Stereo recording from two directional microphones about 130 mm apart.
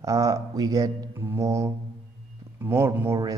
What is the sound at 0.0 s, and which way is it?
A man's voice, 25° right (ahead or behind).